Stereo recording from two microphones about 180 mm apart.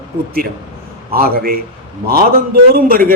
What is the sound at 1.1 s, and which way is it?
A man's voice, 55° right (ahead or behind).